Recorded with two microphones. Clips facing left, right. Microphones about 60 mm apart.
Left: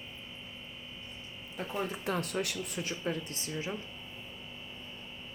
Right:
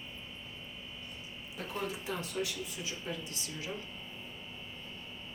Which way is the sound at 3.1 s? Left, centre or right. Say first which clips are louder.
Left 5 dB; left.